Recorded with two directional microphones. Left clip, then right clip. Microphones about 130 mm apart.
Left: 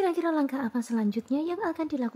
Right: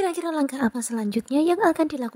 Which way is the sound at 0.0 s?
45° right (ahead or behind).